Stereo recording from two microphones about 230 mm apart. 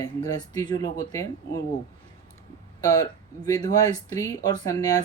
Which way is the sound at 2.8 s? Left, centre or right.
Centre.